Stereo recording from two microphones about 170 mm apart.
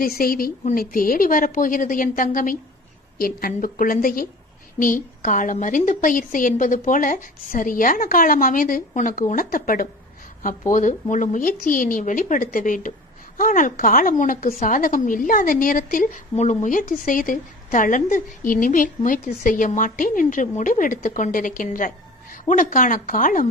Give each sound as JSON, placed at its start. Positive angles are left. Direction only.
{"t": 0.0, "sound": "a woman's voice", "side_deg": 60}